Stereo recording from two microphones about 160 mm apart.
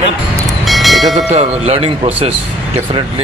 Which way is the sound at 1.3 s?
40° right (ahead or behind).